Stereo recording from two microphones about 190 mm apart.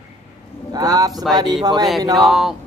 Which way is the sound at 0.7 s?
20° right (ahead or behind).